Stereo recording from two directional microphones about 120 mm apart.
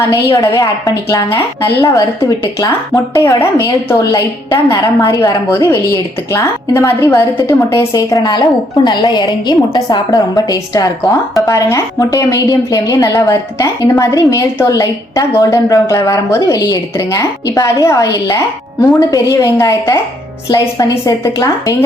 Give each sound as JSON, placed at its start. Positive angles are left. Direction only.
{"t": 0.3, "sound": "a woman's voice", "side_deg": 25}
{"t": 2.6, "sound": "a woman's voice", "side_deg": 25}
{"t": 4.5, "sound": "a woman's voice", "side_deg": 25}